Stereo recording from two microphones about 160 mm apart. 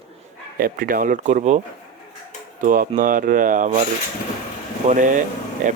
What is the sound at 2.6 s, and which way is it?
Speech, 60° right (ahead or behind).